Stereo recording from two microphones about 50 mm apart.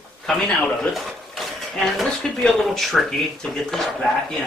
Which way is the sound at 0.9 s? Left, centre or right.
Centre.